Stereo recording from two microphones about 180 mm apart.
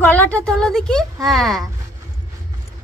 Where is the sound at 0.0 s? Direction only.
10° left (ahead or behind).